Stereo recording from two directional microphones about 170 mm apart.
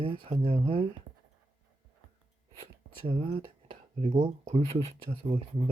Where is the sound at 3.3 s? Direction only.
35° right (ahead or behind).